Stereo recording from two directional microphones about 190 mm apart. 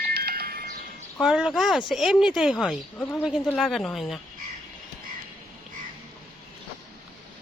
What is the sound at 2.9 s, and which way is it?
Speech, 10° left (ahead or behind).